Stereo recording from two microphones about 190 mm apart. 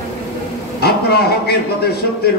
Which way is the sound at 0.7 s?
55° left (ahead or behind).